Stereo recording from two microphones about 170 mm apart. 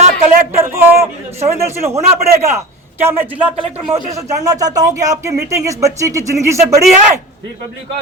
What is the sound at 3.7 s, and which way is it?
Speech, 35° right (ahead or behind).